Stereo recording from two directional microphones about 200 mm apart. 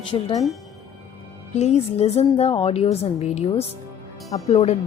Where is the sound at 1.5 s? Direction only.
35° left (ahead or behind).